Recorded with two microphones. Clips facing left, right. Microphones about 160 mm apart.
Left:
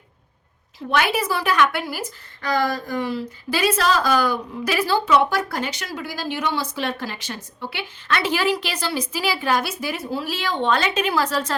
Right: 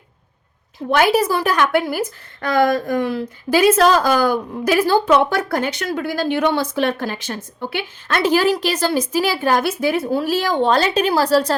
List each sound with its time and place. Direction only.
0.9 s a woman's voice: 40° right (ahead or behind)